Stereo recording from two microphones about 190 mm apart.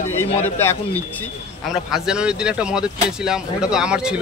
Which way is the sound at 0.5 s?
10° left (ahead or behind).